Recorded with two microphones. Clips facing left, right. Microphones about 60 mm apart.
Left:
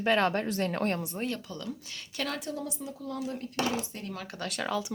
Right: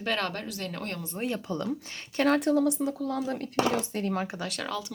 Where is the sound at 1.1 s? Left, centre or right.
Centre.